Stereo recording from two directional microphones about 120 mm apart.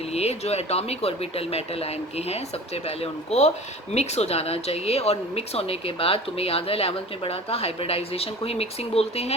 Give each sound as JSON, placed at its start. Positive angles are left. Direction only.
{"t": 0.1, "sound": "speech", "side_deg": 60}